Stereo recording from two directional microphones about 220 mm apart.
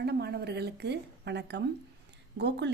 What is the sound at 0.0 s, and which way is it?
A woman's voice, 50° right (ahead or behind).